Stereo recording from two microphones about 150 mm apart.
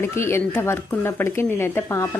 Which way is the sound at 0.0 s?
15° left (ahead or behind).